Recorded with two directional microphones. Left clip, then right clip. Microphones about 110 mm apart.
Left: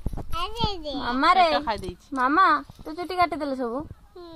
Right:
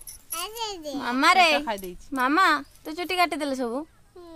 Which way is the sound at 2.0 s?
30° right (ahead or behind).